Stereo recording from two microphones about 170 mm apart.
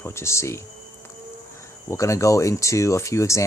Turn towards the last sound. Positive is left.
turn(degrees=15)  # may be behind; listen again after turning